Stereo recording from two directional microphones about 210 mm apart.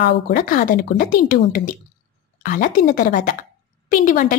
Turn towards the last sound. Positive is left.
turn(degrees=40)  # may be behind; listen again after turning